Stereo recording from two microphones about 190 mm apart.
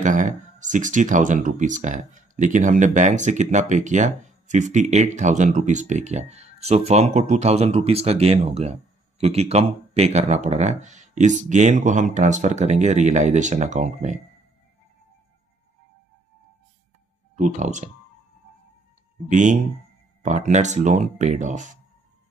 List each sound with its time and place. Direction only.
0.0 s speech: 40° right (ahead or behind)
17.4 s speech: 40° right (ahead or behind)
19.2 s speech: 40° right (ahead or behind)